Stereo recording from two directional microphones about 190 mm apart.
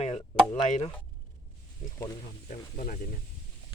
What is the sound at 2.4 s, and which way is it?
Speech, 40° left (ahead or behind).